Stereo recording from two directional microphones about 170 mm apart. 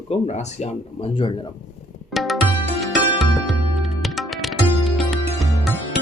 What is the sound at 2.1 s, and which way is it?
Music, centre (ahead or behind).